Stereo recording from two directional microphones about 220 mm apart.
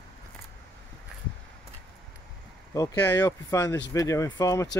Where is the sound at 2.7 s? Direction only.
15° left (ahead or behind).